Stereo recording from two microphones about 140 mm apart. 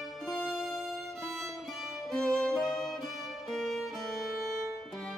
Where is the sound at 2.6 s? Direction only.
Centre (ahead or behind).